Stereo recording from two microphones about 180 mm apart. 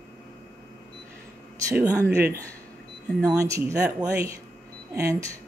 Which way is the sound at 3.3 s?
20° right (ahead or behind).